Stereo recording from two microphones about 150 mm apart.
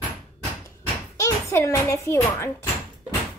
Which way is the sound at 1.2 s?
20° left (ahead or behind).